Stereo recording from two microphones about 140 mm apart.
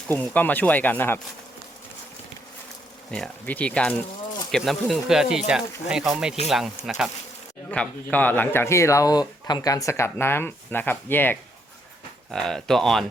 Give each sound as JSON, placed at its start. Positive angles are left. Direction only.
{"t": 0.1, "sound": "speech", "side_deg": 10}
{"t": 3.1, "sound": "speech", "side_deg": 10}
{"t": 7.7, "sound": "speech", "side_deg": 10}